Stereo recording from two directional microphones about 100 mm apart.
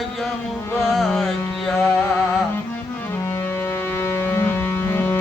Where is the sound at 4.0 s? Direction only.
20° left (ahead or behind).